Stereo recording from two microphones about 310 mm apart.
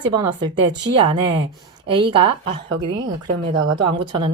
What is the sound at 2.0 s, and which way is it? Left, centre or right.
Speech, centre.